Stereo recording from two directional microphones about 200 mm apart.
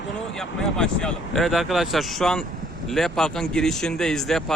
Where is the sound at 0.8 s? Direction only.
5° left (ahead or behind).